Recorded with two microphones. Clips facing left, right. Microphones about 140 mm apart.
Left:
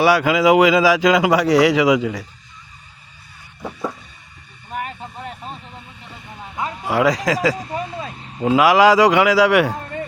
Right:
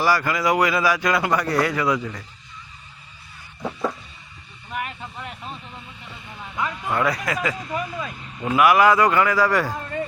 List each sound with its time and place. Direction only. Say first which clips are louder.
0.0 s a man's voice: left 6 dB; 70° left (ahead or behind); by 2.2 s 90° left
4.7 s vehicle: left 2 dB; 40° left (ahead or behind)
6.8 s a man's voice: left 7 dB; 90° left
7.5 s speech: left 2 dB; 30° left (ahead or behind)
8.5 s a man's voice: left 3 dB; 90° left; by 9.7 s 70° left (ahead or behind)
9.7 s a sound: left 1 dB; 25° left (ahead or behind)